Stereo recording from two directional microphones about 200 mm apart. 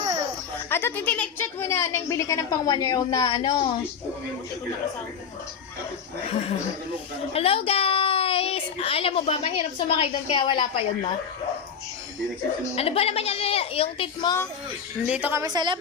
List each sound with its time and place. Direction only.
0.7 s a woman's voice: 10° left (ahead or behind)
6.2 s a woman's voice: 30° left (ahead or behind)
12.7 s a woman's voice: 30° left (ahead or behind)
15.0 s a woman's voice: 10° right (ahead or behind)